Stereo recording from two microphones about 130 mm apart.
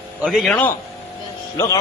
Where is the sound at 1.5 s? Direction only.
20° left (ahead or behind).